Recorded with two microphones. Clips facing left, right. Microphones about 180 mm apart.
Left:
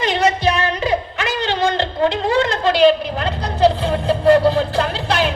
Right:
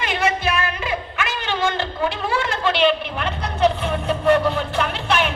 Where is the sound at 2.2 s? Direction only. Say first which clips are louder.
Left 5 dB; 40° left (ahead or behind).